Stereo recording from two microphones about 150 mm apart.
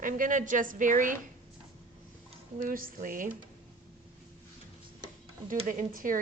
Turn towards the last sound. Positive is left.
turn(degrees=-65)  # may be behind; listen again after turning